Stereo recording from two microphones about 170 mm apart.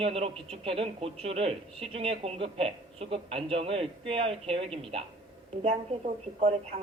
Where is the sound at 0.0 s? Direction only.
35° right (ahead or behind).